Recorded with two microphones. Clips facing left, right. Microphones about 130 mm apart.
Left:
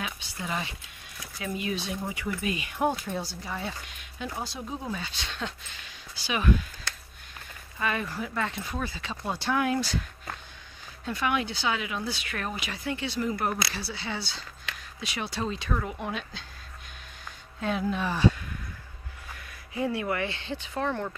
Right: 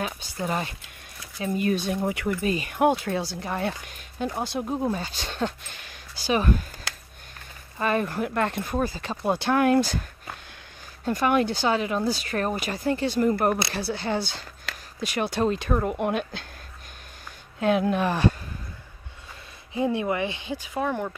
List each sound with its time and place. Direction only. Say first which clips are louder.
0.0 s speech: right 6 dB; 45° right (ahead or behind); by 2.3 s 65° right (ahead or behind)
2.4 s speech: right 5 dB; 40° right (ahead or behind)
2.7 s speech: right 6 dB; 75° right (ahead or behind); by 6.6 s 40° right (ahead or behind)
7.8 s speech: right 6 dB; 45° right (ahead or behind)
8.7 s speech: right 7 dB; 45° right (ahead or behind)
9.2 s speech: right 6 dB; 55° right (ahead or behind)
11.1 s speech: right 6 dB; 45° right (ahead or behind)
16.0 s speech: right 8 dB; 60° right (ahead or behind)
17.6 s speech: right 7 dB; 65° right (ahead or behind)
19.7 s speech: right 4 dB; 20° right (ahead or behind)